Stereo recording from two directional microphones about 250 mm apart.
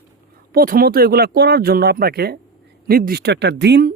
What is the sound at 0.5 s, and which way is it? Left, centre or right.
Speech, right.